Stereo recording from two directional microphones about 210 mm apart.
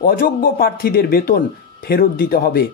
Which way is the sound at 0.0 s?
45° left (ahead or behind).